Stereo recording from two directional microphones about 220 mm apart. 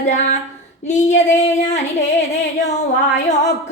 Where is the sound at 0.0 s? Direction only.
30° left (ahead or behind).